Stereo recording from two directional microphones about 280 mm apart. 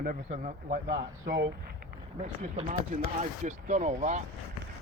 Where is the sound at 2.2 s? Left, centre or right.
Right.